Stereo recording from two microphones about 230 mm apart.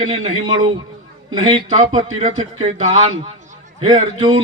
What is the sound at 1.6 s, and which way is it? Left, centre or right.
A man's voice, right.